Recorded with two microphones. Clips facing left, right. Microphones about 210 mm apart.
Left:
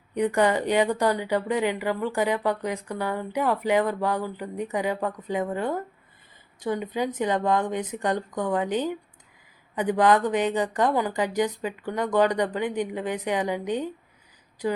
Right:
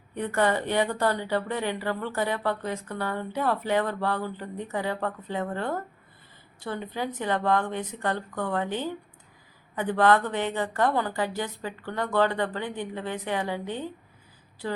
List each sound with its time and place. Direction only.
0.1 s a woman's voice: 15° left (ahead or behind)